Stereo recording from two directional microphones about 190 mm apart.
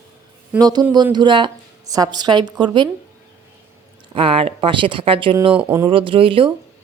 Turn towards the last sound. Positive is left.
turn(degrees=-30)  # may be behind; listen again after turning